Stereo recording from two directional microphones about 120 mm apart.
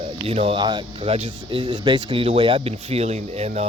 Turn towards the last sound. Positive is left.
turn(degrees=-65)  # may be behind; listen again after turning